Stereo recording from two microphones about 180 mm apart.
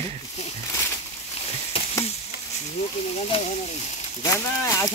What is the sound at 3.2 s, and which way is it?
Speech, 30° left (ahead or behind).